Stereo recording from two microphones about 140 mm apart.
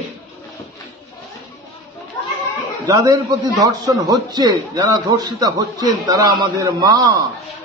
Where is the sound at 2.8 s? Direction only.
25° right (ahead or behind).